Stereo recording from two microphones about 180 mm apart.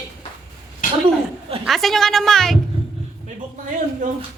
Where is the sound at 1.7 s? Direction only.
Centre (ahead or behind).